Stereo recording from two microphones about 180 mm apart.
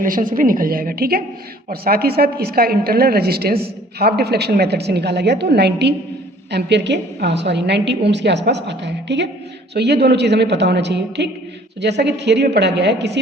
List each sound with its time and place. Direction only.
0.0 s a woman's voice: 50° right (ahead or behind); by 13.1 s 70° right (ahead or behind)